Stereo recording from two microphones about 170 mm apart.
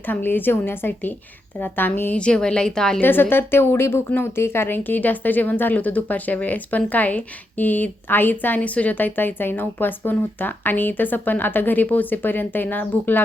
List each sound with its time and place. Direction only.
0.1 s a woman's voice: 10° left (ahead or behind)